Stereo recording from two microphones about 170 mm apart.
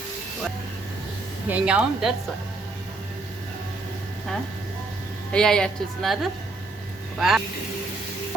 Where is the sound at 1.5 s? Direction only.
5° right (ahead or behind).